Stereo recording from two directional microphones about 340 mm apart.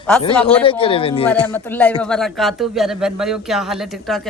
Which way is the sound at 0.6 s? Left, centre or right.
Centre.